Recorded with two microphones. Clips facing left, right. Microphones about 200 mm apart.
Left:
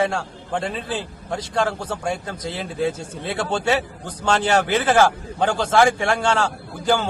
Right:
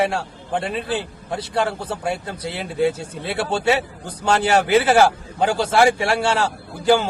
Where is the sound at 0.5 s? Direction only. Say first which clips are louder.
Right 2 dB; 5° right (ahead or behind).